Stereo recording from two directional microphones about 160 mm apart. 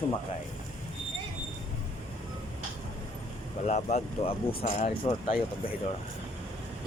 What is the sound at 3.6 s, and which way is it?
Speech, 45° left (ahead or behind).